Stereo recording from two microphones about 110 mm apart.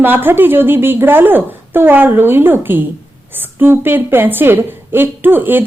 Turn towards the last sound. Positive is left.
turn(degrees=-20)  # may be behind; listen again after turning